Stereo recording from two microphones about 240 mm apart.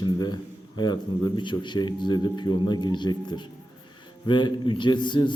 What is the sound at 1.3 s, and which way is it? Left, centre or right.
A man's voice, centre.